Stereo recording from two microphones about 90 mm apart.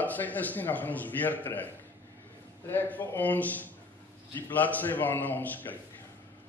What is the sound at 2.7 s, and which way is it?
A man's voice, 20° left (ahead or behind).